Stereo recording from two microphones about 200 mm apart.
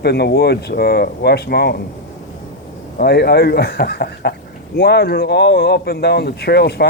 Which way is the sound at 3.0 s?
50° left (ahead or behind).